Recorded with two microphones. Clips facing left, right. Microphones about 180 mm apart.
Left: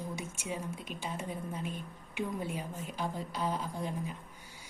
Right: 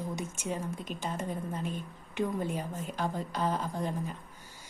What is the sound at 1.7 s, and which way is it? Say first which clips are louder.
Speech: right 3 dB; 5° left (ahead or behind).